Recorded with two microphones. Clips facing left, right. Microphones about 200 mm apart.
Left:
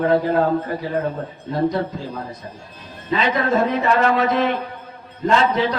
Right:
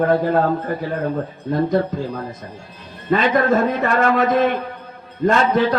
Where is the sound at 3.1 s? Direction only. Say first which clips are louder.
Right 3 dB; 50° right (ahead or behind).